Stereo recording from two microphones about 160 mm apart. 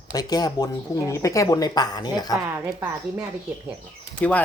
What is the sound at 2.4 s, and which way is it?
Speech, 20° right (ahead or behind).